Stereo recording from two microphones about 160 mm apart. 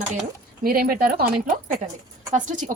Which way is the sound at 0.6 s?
65° right (ahead or behind).